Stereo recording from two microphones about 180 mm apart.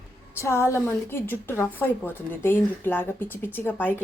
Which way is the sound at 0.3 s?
15° left (ahead or behind).